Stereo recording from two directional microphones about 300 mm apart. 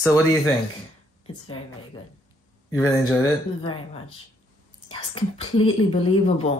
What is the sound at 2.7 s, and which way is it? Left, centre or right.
Speech, centre.